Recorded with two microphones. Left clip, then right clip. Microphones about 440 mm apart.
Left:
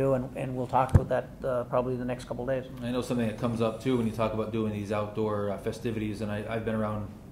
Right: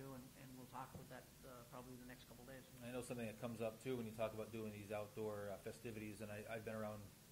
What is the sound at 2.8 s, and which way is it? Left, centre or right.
Speech, right.